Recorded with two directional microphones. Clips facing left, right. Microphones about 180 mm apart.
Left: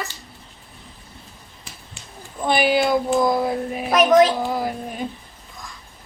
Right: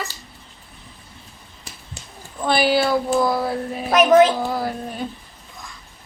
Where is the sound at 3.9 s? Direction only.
5° right (ahead or behind).